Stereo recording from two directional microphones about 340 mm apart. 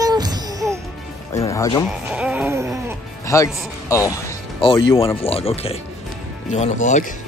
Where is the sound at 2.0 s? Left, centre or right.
Centre.